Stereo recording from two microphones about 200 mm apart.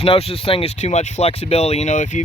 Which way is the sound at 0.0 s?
30° left (ahead or behind).